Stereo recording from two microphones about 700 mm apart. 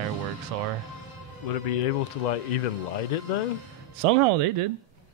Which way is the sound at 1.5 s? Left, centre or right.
Left.